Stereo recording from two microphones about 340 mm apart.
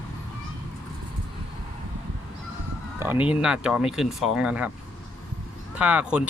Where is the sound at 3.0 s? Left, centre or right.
Centre.